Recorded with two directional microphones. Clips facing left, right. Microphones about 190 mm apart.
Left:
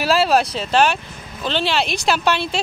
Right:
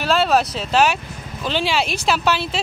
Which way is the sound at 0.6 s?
Centre (ahead or behind).